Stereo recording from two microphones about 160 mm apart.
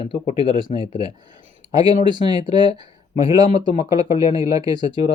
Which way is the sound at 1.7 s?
25° right (ahead or behind).